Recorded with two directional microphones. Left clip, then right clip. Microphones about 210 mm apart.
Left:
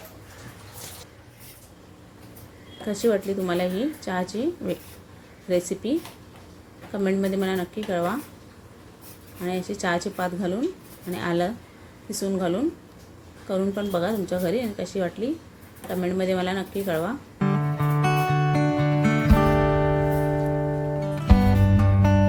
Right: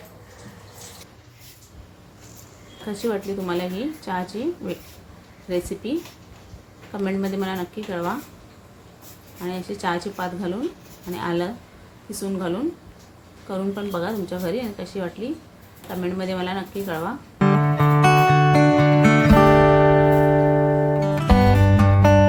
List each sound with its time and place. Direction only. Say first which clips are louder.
2.8 s a woman's voice: left 3 dB; 15° left (ahead or behind)
7.0 s a woman's voice: left 1 dB; 15° left (ahead or behind)
9.4 s a woman's voice: even; 10° left (ahead or behind)
13.5 s a woman's voice: left 2 dB; 15° left (ahead or behind)
17.3 s music: right 11 dB; centre (ahead or behind)